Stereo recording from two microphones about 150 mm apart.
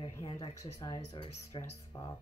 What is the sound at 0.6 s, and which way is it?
Speech, 25° left (ahead or behind).